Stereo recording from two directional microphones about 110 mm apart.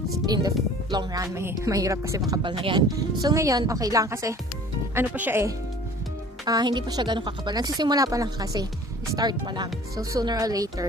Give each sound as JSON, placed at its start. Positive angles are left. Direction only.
{"t": 0.3, "sound": "a woman's voice", "side_deg": -40}
{"t": 4.9, "sound": "speech", "side_deg": -15}
{"t": 6.4, "sound": "a woman's voice", "side_deg": -35}